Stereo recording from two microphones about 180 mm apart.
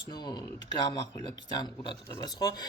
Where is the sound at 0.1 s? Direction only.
25° left (ahead or behind).